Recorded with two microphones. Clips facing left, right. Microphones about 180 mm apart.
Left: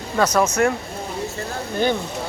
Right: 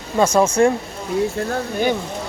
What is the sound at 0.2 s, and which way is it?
Speech, 25° right (ahead or behind).